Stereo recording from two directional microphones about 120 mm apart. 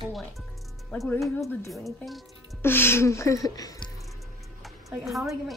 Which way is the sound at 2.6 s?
20° left (ahead or behind).